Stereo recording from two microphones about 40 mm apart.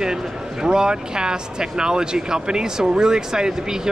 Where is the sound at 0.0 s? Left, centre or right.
Centre.